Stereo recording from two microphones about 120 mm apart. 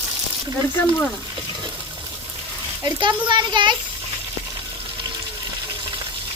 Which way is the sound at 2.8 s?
35° right (ahead or behind).